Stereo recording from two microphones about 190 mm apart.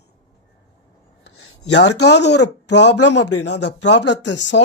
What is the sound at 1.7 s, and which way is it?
Speech, 65° left (ahead or behind).